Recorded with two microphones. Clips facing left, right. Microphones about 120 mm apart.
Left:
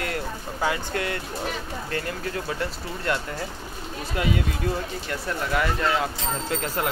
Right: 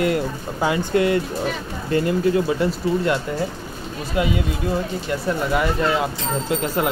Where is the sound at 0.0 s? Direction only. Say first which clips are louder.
Right 9 dB; 15° right (ahead or behind).